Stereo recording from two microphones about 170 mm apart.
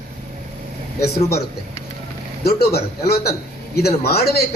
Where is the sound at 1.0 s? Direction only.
65° left (ahead or behind).